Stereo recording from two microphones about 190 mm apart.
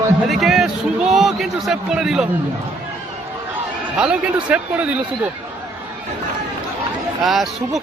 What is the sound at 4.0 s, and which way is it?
Speech, 5° right (ahead or behind).